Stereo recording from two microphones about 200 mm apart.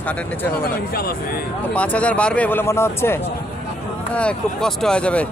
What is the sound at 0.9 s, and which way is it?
Speech, 50° left (ahead or behind).